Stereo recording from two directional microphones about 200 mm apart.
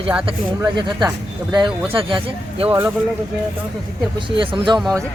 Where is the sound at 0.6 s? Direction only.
20° right (ahead or behind).